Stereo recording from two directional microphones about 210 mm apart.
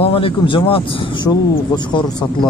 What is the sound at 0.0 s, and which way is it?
Speech, 25° left (ahead or behind).